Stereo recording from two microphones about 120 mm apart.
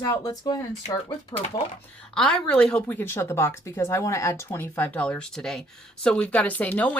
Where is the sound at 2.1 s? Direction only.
5° left (ahead or behind).